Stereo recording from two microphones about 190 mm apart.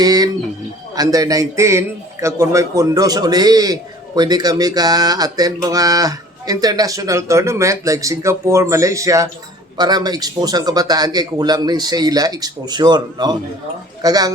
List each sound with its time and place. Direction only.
0.0 s a man's voice: 20° right (ahead or behind)